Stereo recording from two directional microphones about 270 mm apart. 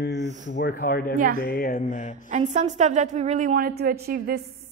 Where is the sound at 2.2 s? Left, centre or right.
Right.